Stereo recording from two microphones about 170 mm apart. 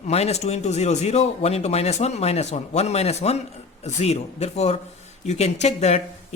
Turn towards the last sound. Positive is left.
turn(degrees=40)  # may be behind; listen again after turning